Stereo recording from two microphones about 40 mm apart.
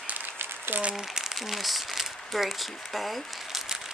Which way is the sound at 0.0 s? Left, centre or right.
Right.